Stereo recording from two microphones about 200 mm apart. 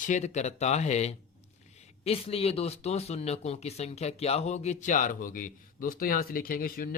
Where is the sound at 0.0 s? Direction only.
35° left (ahead or behind).